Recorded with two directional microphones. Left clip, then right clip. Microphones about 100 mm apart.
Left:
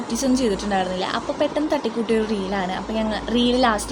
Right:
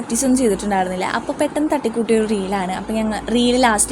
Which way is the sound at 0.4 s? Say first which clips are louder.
Right 4 dB; 50° right (ahead or behind).